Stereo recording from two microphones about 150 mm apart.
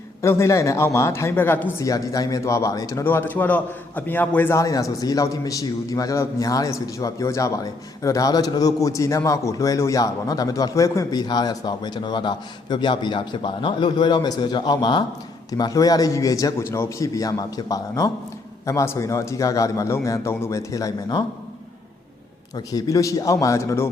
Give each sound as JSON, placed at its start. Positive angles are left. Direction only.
{"t": 0.2, "sound": "a man's voice", "side_deg": 20}
{"t": 22.5, "sound": "a man's voice", "side_deg": 25}